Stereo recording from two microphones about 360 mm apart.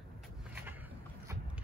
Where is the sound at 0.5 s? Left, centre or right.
Centre.